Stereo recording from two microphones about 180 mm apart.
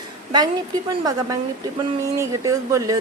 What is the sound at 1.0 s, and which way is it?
A woman's voice, 20° right (ahead or behind).